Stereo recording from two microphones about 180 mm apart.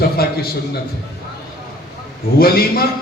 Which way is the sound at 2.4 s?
55° left (ahead or behind).